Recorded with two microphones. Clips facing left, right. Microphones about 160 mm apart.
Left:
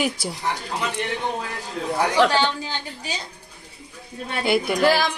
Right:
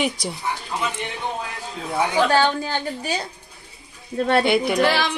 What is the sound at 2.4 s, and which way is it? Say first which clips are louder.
Speech: right 4 dB; 50° right (ahead or behind).